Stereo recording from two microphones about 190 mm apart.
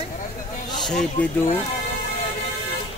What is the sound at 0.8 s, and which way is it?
Speech, 5° left (ahead or behind).